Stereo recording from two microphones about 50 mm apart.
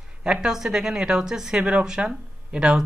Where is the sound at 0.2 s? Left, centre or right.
Centre.